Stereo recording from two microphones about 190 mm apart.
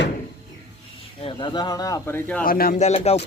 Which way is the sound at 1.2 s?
30° left (ahead or behind).